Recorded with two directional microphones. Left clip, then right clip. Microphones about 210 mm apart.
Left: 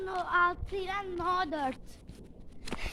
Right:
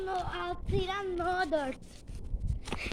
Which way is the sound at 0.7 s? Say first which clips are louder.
Right 2 dB; 35° left (ahead or behind).